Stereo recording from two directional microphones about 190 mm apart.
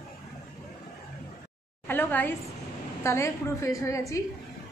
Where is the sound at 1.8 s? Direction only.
10° left (ahead or behind).